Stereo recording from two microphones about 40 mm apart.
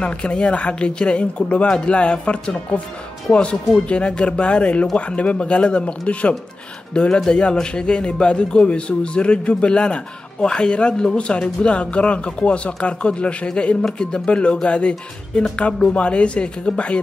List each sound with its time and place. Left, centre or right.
0.0 s a man's voice: left